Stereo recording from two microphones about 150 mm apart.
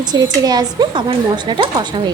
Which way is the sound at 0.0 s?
25° right (ahead or behind).